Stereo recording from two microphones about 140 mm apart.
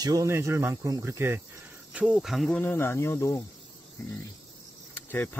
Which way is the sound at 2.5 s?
15° left (ahead or behind).